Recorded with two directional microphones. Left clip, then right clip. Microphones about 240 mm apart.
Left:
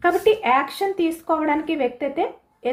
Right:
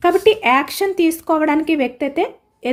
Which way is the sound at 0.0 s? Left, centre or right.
Right.